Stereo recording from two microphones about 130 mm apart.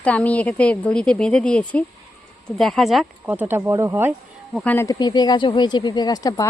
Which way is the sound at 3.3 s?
15° right (ahead or behind).